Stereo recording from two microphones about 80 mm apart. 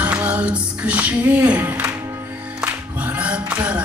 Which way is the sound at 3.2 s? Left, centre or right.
Centre.